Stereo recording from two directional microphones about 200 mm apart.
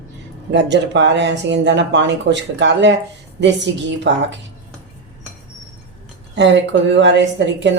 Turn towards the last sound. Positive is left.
turn(degrees=-60)  # may be behind; listen again after turning